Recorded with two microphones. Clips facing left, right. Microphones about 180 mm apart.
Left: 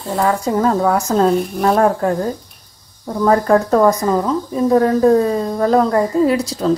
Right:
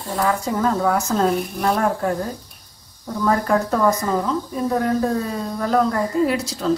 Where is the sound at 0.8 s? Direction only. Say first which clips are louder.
Left 4 dB; 35° left (ahead or behind).